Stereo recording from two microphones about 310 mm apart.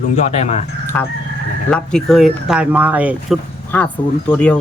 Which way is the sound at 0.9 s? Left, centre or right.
Centre.